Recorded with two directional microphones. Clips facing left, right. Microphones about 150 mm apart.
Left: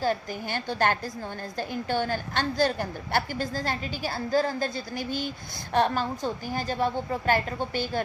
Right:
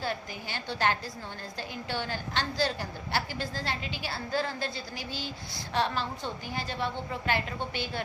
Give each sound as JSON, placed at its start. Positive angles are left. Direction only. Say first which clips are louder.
{"t": 0.0, "sound": "a woman's voice", "louder": "left 7 dB", "side_deg": 45}